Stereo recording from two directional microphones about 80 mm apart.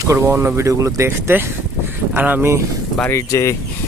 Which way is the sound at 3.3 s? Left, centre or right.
Left.